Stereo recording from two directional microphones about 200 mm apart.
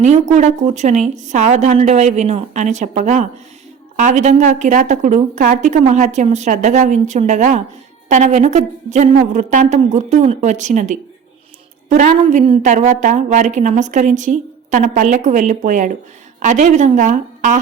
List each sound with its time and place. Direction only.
0.0 s a woman's voice: 35° right (ahead or behind)